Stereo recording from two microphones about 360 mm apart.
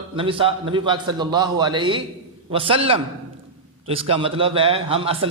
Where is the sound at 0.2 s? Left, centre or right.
Centre.